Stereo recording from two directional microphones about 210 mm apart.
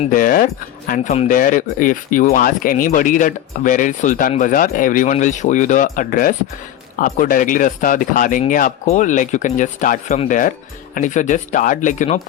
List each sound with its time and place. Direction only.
0.0 s speech: 40° left (ahead or behind)